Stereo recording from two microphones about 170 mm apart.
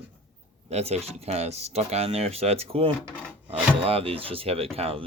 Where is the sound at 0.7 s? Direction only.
40° right (ahead or behind).